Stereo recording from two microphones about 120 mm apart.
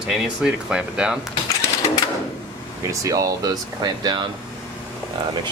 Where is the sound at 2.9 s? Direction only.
30° right (ahead or behind).